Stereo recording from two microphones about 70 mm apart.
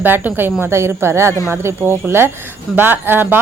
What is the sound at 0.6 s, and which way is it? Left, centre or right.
A woman's voice, right.